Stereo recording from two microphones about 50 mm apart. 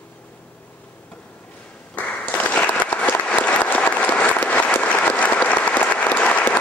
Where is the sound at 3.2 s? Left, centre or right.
Left.